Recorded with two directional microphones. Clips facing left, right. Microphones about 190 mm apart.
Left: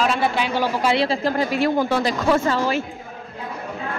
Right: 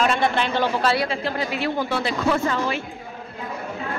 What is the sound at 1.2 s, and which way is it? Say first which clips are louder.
Speech: left 5 dB; 45° left (ahead or behind).